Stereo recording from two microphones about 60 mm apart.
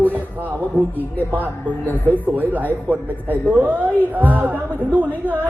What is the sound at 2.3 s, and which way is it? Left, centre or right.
Speech, right.